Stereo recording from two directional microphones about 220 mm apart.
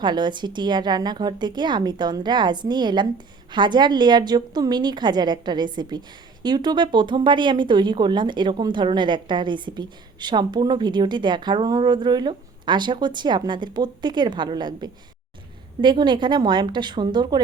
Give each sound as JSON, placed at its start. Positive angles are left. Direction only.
{"t": 0.0, "sound": "speech", "side_deg": -20}